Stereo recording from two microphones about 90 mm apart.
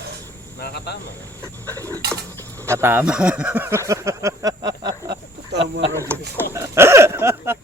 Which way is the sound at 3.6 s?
35° right (ahead or behind).